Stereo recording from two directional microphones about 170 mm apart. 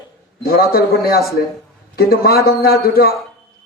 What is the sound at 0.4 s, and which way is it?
A man's voice, 60° left (ahead or behind).